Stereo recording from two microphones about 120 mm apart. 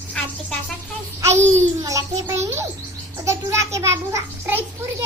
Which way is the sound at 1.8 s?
30° right (ahead or behind).